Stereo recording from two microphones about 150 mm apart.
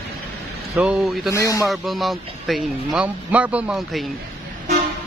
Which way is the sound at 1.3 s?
20° left (ahead or behind).